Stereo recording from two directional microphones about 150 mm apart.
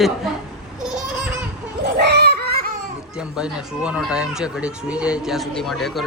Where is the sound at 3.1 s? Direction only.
5° right (ahead or behind).